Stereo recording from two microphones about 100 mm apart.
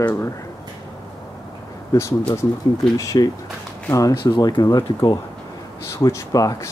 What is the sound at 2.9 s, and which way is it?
Speech, 35° left (ahead or behind).